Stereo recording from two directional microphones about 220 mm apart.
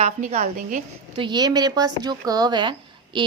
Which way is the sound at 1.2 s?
20° right (ahead or behind).